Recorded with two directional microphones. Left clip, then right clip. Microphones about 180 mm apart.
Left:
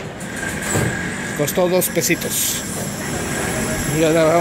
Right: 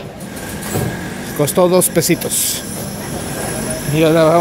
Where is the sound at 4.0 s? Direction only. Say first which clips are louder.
Right 4 dB; 25° right (ahead or behind).